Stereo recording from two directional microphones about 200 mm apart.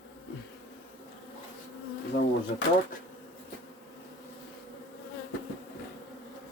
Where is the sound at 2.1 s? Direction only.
60° left (ahead or behind).